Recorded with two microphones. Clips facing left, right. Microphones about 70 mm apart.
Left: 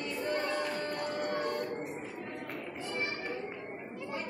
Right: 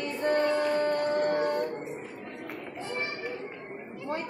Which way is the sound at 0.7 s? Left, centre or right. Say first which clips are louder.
Right 9 dB; right.